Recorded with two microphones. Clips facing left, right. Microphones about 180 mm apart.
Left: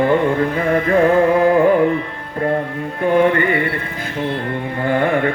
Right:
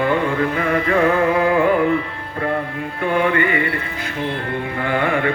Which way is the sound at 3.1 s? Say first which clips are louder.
Left 4 dB; 40° left (ahead or behind).